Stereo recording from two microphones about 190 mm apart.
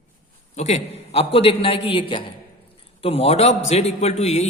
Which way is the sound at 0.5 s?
35° left (ahead or behind).